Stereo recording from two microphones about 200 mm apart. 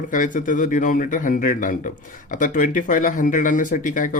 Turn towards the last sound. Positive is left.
turn(degrees=40)  # may be behind; listen again after turning